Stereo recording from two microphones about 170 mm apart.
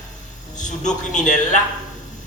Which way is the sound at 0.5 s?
45° left (ahead or behind).